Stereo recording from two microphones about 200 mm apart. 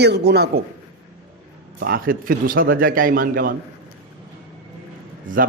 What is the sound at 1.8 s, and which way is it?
Speech, 45° right (ahead or behind).